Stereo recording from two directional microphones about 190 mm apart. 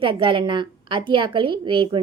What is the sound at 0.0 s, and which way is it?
A woman's voice, 25° right (ahead or behind).